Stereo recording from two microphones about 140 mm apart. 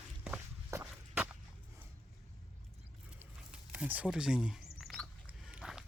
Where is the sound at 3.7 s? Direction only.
10° right (ahead or behind).